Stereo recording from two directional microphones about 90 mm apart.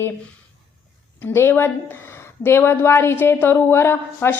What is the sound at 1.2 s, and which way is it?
Speech, 25° left (ahead or behind).